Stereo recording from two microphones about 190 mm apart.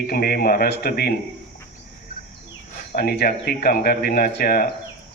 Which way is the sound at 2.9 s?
55° left (ahead or behind).